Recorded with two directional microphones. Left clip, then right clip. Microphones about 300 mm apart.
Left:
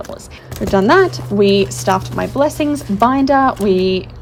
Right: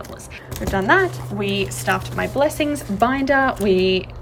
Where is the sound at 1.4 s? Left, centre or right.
Centre.